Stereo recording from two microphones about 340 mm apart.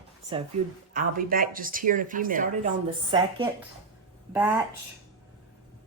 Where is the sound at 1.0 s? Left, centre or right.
Right; by 4.6 s centre.